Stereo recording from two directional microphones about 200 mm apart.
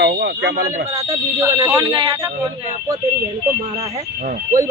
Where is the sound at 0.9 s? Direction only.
15° right (ahead or behind).